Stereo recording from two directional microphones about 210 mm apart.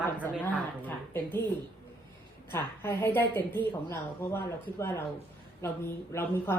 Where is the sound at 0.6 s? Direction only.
10° left (ahead or behind).